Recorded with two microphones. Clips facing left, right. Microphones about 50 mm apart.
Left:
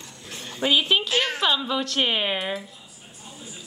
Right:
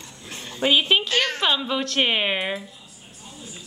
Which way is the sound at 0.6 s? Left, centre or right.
Centre.